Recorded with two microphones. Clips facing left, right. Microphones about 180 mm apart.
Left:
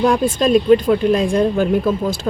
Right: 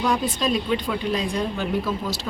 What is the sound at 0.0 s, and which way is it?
Speech, 50° left (ahead or behind).